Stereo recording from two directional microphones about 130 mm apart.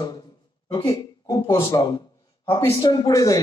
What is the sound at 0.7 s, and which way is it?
A man's voice, 30° left (ahead or behind).